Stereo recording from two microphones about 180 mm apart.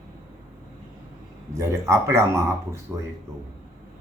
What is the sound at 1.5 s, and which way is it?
A man's voice, 15° right (ahead or behind).